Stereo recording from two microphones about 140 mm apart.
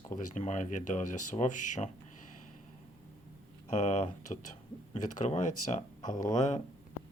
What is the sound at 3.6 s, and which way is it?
Speech, 55° left (ahead or behind).